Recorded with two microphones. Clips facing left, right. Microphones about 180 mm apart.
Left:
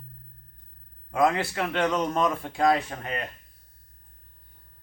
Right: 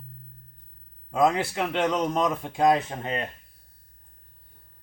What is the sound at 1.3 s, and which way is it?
A man's voice, 15° right (ahead or behind).